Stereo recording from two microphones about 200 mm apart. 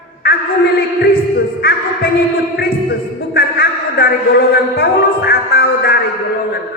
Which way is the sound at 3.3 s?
50° left (ahead or behind).